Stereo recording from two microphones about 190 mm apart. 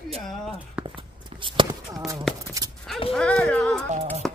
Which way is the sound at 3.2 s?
5° left (ahead or behind).